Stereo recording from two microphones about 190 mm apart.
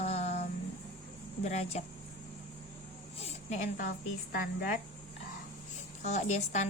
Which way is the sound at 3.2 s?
35° left (ahead or behind).